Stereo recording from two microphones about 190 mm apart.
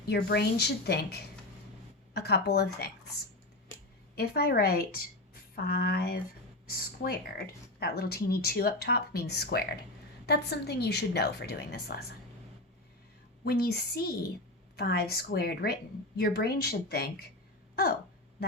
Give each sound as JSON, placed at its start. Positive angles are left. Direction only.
{"t": 0.1, "sound": "a woman's voice", "side_deg": 60}
{"t": 4.1, "sound": "a woman's voice", "side_deg": 55}
{"t": 13.4, "sound": "a woman's voice", "side_deg": 55}